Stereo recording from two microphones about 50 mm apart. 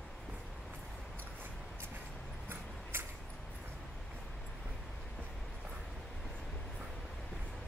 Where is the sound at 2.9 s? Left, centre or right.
Right.